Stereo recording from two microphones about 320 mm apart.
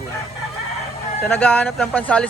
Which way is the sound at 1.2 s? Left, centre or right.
Centre.